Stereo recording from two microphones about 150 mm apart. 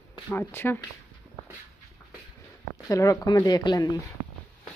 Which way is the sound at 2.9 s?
25° left (ahead or behind).